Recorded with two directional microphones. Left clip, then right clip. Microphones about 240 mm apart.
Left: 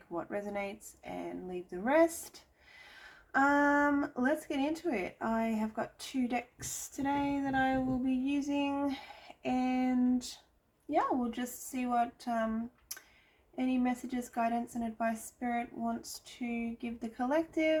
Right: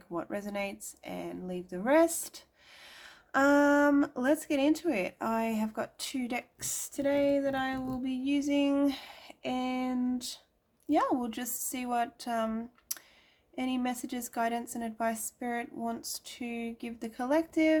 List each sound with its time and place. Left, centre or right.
0.1 s speech: right
13.6 s speech: right